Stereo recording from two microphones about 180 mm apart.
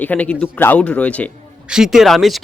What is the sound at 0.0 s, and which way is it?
A man's voice, 10° left (ahead or behind).